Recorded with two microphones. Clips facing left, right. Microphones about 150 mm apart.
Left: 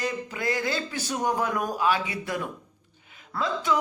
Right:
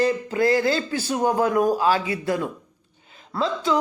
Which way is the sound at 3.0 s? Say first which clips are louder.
Right 4 dB; 30° right (ahead or behind).